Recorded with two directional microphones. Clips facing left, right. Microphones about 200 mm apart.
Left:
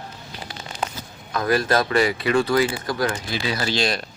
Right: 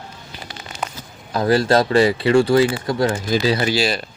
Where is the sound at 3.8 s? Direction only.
Centre (ahead or behind).